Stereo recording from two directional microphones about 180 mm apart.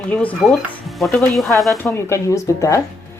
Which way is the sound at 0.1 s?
5° left (ahead or behind).